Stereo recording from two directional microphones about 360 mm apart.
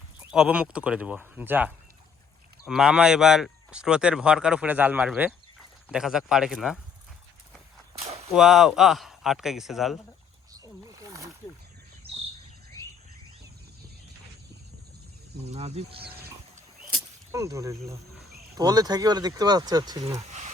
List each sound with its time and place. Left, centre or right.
0.2 s speech: centre
8.3 s speech: centre
10.8 s wild animals: centre
15.4 s speech: centre
17.3 s speech: centre
20.2 s a sound: centre